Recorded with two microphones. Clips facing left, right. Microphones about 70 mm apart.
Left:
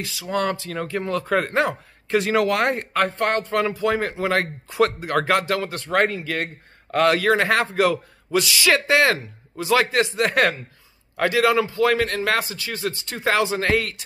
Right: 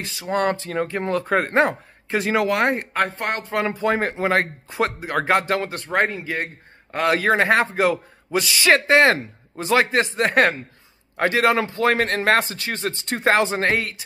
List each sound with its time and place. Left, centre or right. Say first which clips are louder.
0.0 s a man's voice: right 2 dB; right; by 3.6 s centre
3.6 s a man's voice: right 1 dB; right